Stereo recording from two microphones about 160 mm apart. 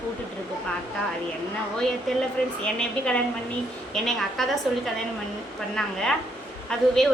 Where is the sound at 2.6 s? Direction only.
5° left (ahead or behind).